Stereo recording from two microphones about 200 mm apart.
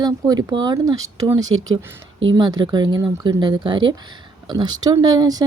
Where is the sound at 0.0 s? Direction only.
20° right (ahead or behind).